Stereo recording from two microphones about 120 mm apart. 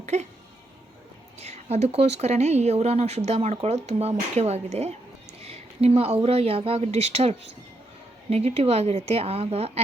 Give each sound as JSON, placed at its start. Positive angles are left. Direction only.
{"t": 0.0, "sound": "speech", "side_deg": -70}
{"t": 1.4, "sound": "speech", "side_deg": -65}